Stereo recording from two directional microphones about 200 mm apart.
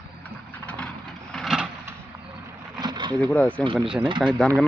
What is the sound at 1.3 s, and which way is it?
Vehicle, centre (ahead or behind).